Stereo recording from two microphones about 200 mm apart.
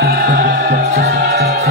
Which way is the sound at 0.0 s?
50° right (ahead or behind).